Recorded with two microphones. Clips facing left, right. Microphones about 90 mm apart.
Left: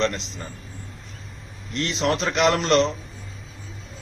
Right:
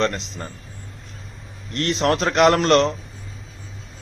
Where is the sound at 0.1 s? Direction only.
Centre (ahead or behind).